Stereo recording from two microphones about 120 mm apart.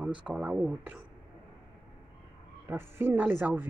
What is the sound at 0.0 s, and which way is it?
Speech, 10° right (ahead or behind).